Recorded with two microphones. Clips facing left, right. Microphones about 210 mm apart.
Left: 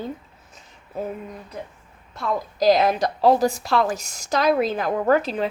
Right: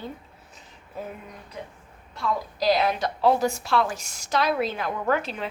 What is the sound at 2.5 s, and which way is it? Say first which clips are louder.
A woman's voice: left 6 dB; 45° left (ahead or behind).